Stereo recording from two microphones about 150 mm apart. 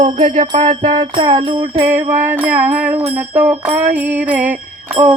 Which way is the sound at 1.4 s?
35° right (ahead or behind).